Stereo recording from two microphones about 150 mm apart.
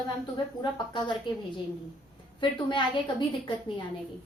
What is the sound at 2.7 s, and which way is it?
Speech, 30° left (ahead or behind).